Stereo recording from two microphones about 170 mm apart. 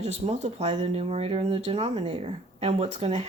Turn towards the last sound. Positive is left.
turn(degrees=-40)  # may be behind; listen again after turning